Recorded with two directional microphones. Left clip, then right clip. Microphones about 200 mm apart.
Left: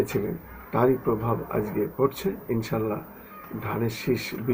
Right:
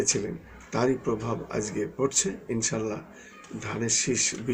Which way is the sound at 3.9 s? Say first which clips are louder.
Right 2 dB; 60° right (ahead or behind).